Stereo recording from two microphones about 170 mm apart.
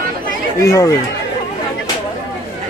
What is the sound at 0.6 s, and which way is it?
Speech, 20° left (ahead or behind).